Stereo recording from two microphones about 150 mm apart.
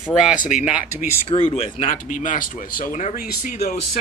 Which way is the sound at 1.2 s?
40° left (ahead or behind).